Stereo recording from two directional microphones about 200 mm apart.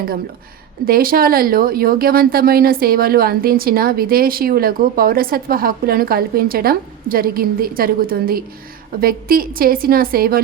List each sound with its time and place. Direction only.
0.9 s speech: 45° right (ahead or behind)